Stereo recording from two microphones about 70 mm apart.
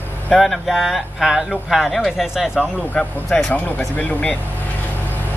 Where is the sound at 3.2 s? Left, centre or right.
Centre.